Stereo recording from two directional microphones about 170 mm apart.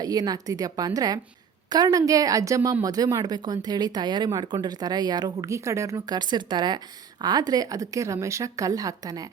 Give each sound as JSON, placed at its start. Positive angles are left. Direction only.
{"t": 0.0, "sound": "a woman's voice", "side_deg": -20}